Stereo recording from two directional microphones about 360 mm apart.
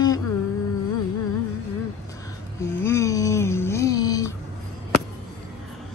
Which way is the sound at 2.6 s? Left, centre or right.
Centre.